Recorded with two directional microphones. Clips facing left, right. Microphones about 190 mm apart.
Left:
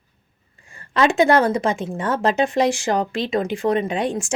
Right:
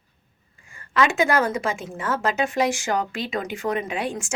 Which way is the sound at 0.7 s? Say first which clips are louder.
Left 4 dB; 35° left (ahead or behind).